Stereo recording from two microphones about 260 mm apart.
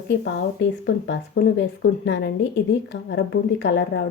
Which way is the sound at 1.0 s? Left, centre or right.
Left.